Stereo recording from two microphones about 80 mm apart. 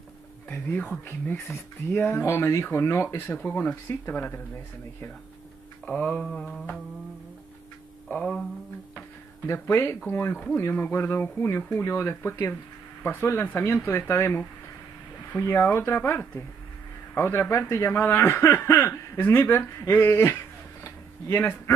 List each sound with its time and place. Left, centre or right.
0.5 s speech: centre
3.8 s speech: left
4.1 s speech: left
5.9 s speech: centre
6.2 s speech: centre
8.1 s speech: centre
9.5 s speech: left
10.3 s speech: centre
10.6 s speech: left